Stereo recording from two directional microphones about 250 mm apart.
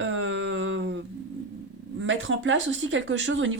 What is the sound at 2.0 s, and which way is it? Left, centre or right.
Speech, right.